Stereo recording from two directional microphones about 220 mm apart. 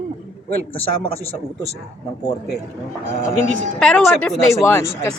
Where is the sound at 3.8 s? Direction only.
Centre (ahead or behind).